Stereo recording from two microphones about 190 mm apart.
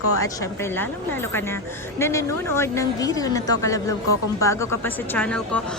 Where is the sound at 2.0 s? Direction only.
15° left (ahead or behind).